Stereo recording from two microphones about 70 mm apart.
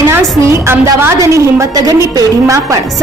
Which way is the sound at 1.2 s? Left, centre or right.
Right.